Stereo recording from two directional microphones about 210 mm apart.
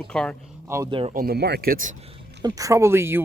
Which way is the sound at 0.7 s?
20° right (ahead or behind).